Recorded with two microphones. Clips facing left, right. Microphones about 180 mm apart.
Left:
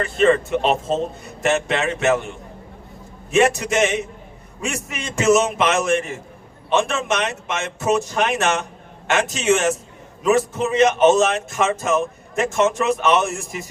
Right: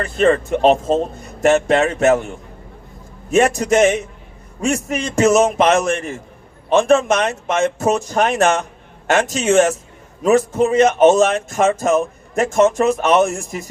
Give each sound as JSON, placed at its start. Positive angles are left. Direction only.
{"t": 0.0, "sound": "speech", "side_deg": -40}
{"t": 3.3, "sound": "speech", "side_deg": -40}